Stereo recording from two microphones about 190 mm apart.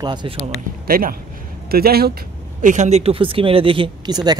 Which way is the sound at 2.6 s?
40° right (ahead or behind).